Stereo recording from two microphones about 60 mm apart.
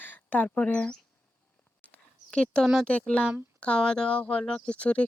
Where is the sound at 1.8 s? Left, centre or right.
Centre.